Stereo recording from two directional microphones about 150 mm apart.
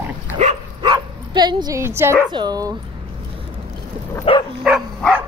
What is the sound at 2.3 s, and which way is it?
Speech, 25° right (ahead or behind).